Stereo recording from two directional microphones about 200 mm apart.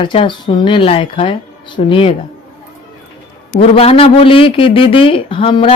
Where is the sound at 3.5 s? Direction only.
30° left (ahead or behind).